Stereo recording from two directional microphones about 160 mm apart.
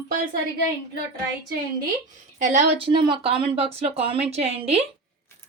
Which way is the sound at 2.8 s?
30° right (ahead or behind).